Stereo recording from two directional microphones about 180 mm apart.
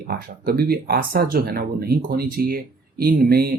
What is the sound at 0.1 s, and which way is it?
Speech, 60° right (ahead or behind).